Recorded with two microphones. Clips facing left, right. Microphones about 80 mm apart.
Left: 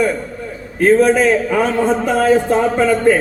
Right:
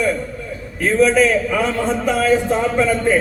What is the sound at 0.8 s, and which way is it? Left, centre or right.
A man's voice, left.